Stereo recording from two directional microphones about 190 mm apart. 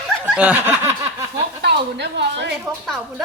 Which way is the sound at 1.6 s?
60° right (ahead or behind).